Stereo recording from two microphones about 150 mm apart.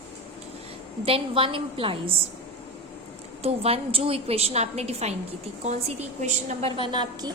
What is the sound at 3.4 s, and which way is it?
A woman's voice, 40° right (ahead or behind).